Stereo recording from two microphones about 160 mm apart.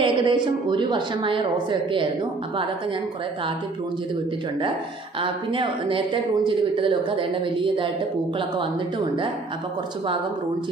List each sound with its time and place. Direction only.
0.0 s a woman's voice: 30° right (ahead or behind)
5.2 s a woman's voice: 30° right (ahead or behind)